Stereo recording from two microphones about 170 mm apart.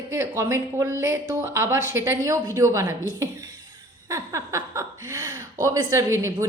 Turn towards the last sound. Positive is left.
turn(degrees=-15)  # may be behind; listen again after turning